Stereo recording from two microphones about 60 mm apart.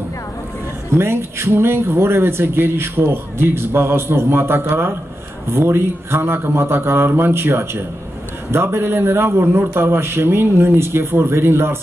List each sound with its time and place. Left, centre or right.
0.9 s a man's voice: right